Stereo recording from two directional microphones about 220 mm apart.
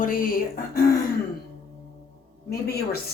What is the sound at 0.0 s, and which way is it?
Speech, 40° left (ahead or behind).